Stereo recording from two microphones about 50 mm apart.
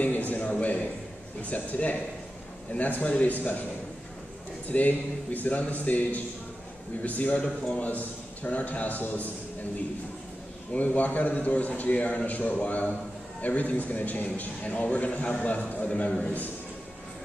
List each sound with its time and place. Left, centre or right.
0.0 s a sound: left
1.5 s a man's voice: left
4.6 s a man's voice: left
7.3 s a man's voice: centre
7.8 s a man's voice: left
10.7 s a man's voice: left